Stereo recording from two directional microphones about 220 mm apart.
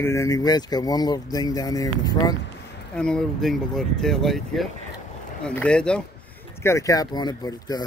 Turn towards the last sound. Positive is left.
turn(degrees=15)  # may be behind; listen again after turning